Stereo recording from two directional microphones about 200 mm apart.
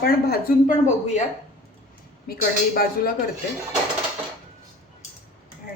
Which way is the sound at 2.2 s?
50° left (ahead or behind).